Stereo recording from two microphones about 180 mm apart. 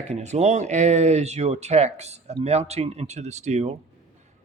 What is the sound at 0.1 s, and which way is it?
Speech, 40° right (ahead or behind).